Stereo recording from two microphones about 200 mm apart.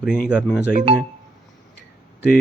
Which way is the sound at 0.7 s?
40° right (ahead or behind).